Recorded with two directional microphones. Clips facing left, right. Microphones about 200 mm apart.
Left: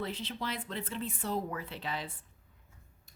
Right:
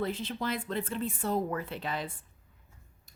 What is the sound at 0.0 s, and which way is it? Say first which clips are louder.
A woman's voice: right 5 dB; 50° right (ahead or behind).